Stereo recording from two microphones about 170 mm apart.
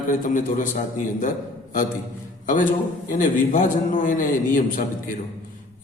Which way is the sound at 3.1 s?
50° left (ahead or behind).